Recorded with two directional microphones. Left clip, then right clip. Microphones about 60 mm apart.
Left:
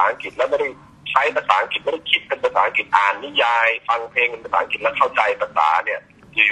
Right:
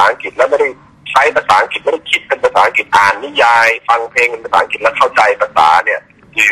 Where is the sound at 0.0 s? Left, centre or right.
Right.